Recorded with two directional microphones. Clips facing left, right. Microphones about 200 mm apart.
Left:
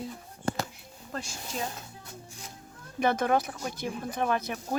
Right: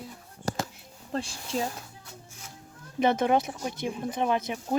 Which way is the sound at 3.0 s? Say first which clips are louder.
Right 2 dB; 20° right (ahead or behind).